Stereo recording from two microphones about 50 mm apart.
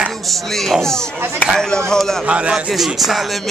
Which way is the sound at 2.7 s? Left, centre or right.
Centre.